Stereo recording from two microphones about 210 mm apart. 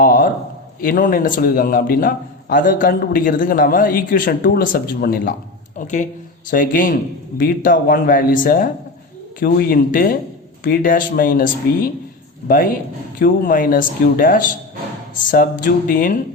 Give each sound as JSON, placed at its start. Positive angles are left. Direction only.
{"t": 0.0, "sound": "a sound", "side_deg": 40}
{"t": 0.8, "sound": "a man's voice", "side_deg": 40}
{"t": 13.1, "sound": "a man's voice", "side_deg": 40}